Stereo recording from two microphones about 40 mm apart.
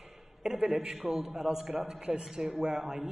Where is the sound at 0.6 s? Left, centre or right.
Right.